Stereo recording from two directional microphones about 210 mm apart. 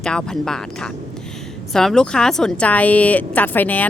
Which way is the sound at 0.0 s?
5° left (ahead or behind).